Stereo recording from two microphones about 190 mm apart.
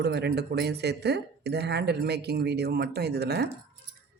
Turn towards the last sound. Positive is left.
turn(degrees=-60)  # may be behind; listen again after turning